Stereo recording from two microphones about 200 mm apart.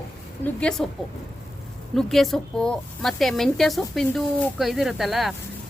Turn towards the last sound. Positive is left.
turn(degrees=0)  # may be behind; listen again after turning